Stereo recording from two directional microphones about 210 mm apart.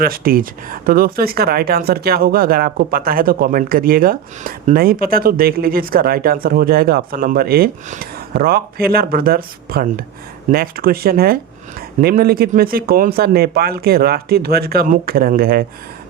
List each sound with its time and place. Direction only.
0.0 s speech: 45° right (ahead or behind)